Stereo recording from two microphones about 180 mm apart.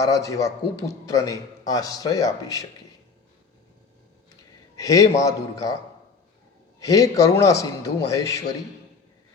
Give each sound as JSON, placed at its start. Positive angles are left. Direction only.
{"t": 0.0, "sound": "a man's voice", "side_deg": 20}
{"t": 4.8, "sound": "speech", "side_deg": 20}
{"t": 6.7, "sound": "a man's voice", "side_deg": 20}